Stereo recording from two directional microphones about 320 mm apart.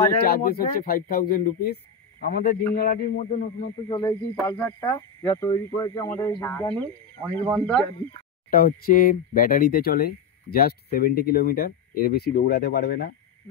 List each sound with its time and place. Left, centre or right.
0.2 s speech: left; by 7.8 s centre
8.5 s speech: left